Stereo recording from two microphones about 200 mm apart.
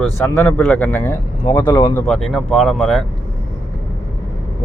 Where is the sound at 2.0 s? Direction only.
Centre (ahead or behind).